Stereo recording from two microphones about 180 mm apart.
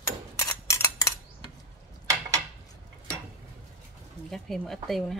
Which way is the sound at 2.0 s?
20° right (ahead or behind).